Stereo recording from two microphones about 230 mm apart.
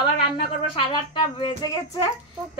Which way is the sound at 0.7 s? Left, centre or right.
Left.